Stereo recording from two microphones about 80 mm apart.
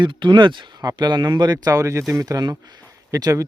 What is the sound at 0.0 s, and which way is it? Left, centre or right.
Speech, right.